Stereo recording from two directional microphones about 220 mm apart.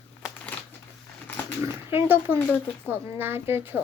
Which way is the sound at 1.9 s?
10° right (ahead or behind).